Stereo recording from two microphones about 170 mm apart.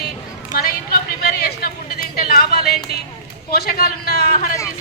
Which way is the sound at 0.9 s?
65° left (ahead or behind).